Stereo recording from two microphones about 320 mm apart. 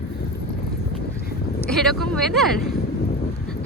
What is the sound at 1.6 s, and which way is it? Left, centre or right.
Speech, centre.